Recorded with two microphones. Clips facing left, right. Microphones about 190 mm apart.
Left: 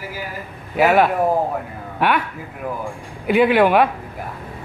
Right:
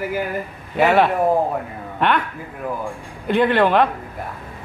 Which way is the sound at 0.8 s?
5° left (ahead or behind).